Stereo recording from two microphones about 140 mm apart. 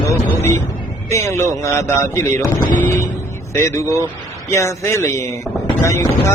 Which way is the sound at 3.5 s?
20° left (ahead or behind).